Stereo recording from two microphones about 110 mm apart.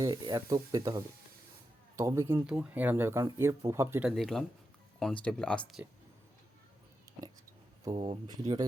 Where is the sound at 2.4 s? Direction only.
10° right (ahead or behind).